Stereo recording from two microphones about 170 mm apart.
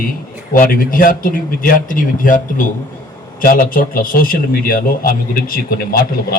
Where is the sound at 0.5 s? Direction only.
55° left (ahead or behind).